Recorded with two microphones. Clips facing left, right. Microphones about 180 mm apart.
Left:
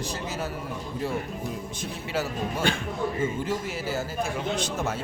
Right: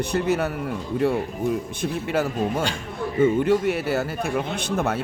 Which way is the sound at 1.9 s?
55° right (ahead or behind).